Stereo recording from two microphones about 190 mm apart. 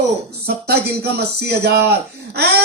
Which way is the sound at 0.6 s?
60° right (ahead or behind).